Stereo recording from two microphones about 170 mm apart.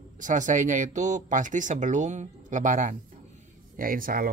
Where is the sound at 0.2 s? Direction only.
50° right (ahead or behind).